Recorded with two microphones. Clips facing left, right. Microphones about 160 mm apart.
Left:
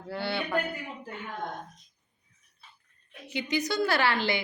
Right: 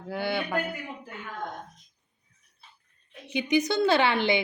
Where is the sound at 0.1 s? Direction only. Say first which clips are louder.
Right 2 dB; 15° right (ahead or behind).